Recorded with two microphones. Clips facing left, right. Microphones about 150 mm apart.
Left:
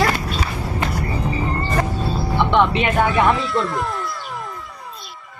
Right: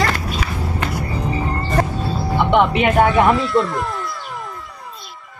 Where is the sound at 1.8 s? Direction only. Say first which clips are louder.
Right 5 dB; 35° right (ahead or behind).